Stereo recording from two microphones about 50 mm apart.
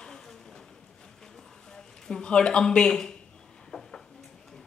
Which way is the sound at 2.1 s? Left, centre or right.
Centre.